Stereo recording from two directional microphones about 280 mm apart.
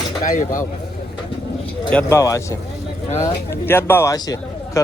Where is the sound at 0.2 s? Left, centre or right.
Left.